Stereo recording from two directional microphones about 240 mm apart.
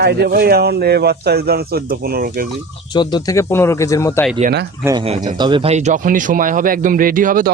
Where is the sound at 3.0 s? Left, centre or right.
Centre.